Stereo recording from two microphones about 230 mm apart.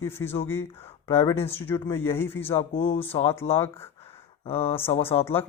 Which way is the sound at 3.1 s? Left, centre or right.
Left.